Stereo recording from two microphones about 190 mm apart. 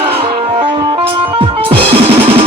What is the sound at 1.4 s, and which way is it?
Music, 30° right (ahead or behind).